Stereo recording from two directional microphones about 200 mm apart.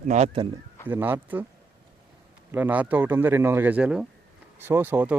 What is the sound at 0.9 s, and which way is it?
Speech, 10° right (ahead or behind).